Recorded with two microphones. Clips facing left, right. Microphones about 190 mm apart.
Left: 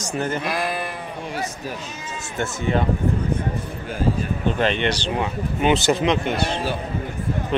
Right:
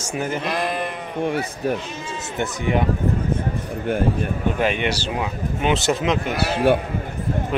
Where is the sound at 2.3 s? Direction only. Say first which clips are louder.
Even; 15° right (ahead or behind).